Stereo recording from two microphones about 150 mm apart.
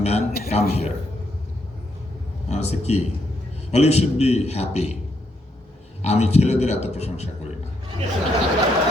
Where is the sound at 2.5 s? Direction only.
45° left (ahead or behind).